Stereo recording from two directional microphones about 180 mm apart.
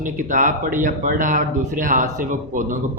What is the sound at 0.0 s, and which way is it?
A man's voice, 45° right (ahead or behind).